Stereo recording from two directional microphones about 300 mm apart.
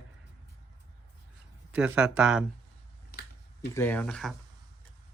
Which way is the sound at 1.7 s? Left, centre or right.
Centre.